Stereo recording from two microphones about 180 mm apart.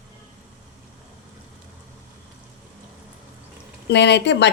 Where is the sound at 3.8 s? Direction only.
70° left (ahead or behind).